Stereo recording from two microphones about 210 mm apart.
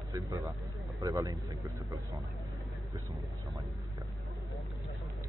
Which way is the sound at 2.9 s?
20° right (ahead or behind).